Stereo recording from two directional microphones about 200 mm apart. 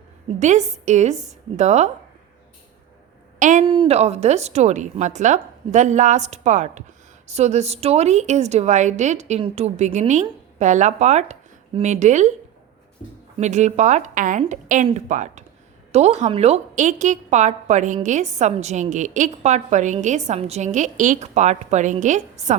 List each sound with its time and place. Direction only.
0.3 s a woman's voice: 35° right (ahead or behind)
3.3 s a woman's voice: 40° right (ahead or behind)
3.7 s a woman's voice: 30° right (ahead or behind)
13.4 s a woman's voice: 35° right (ahead or behind)